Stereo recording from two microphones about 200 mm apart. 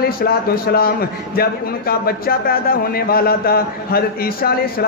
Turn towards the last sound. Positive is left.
turn(degrees=50)  # may be behind; listen again after turning